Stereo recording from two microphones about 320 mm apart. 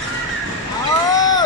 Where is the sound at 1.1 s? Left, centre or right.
Centre.